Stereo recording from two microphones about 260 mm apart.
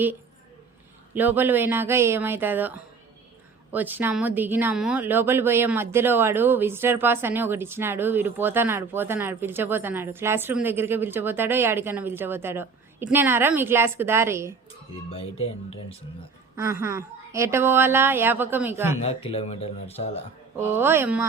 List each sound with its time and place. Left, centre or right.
1.1 s speech: centre
15.1 s speech: left
16.6 s speech: centre
19.0 s speech: left
20.6 s speech: centre